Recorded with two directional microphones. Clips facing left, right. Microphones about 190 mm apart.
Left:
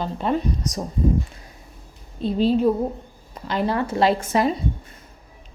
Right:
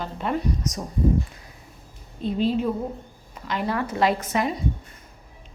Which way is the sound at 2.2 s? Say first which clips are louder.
Left 4 dB; 35° left (ahead or behind).